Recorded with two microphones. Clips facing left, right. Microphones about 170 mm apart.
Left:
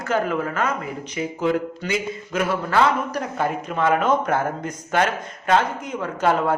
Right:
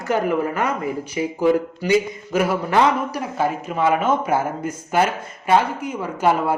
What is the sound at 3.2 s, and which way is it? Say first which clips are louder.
Speech: right 1 dB; 5° right (ahead or behind).